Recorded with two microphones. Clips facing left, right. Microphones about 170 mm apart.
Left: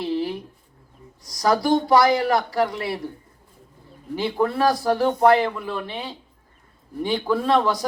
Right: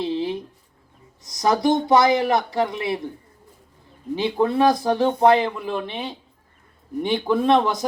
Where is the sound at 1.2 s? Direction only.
20° right (ahead or behind).